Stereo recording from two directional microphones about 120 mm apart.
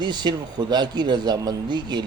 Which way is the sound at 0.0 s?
35° right (ahead or behind).